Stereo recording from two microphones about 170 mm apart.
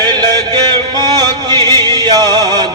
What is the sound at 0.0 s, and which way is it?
Music, 25° right (ahead or behind).